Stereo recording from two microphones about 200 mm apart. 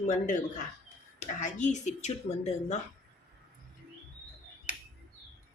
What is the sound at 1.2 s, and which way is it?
Speech, 35° left (ahead or behind).